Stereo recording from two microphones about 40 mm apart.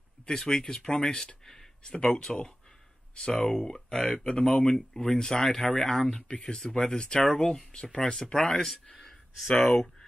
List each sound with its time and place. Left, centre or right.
0.3 s speech: centre